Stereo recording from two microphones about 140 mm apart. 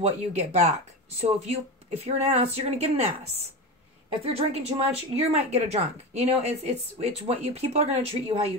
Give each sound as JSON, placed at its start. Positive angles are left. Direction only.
{"t": 0.0, "sound": "a woman's voice", "side_deg": -50}
{"t": 4.2, "sound": "a woman's voice", "side_deg": -45}